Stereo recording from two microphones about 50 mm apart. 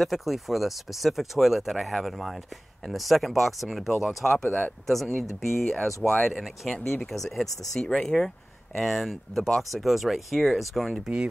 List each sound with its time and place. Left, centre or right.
0.0 s speech: centre
4.5 s speech: left
4.8 s speech: centre